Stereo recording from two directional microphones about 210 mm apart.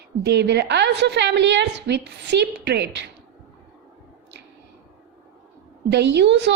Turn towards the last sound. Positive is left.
turn(degrees=-55)  # may be behind; listen again after turning